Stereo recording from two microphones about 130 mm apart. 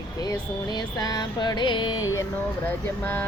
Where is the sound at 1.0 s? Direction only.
30° left (ahead or behind).